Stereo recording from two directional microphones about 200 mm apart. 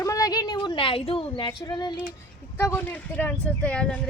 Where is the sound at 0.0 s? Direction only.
15° left (ahead or behind).